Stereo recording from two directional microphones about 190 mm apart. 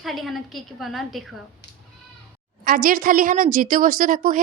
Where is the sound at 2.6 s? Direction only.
50° right (ahead or behind).